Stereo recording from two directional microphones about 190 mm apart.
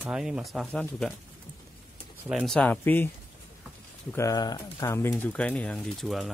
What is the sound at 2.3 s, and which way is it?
Speech, centre (ahead or behind).